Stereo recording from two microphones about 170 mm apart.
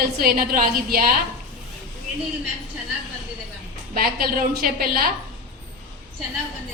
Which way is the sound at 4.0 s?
60° right (ahead or behind).